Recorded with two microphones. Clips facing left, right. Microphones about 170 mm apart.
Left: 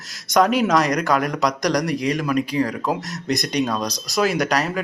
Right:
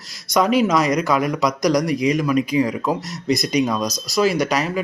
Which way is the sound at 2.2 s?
5° right (ahead or behind).